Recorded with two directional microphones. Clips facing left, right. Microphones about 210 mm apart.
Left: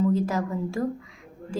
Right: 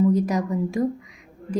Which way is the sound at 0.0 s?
15° right (ahead or behind).